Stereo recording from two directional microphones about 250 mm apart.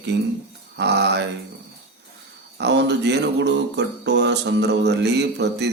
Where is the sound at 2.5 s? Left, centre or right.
Right.